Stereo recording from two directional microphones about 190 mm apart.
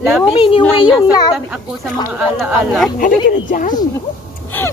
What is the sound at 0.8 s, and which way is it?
Speech, 5° right (ahead or behind).